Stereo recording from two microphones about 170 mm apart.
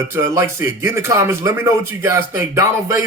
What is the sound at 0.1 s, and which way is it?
Speech, 15° right (ahead or behind).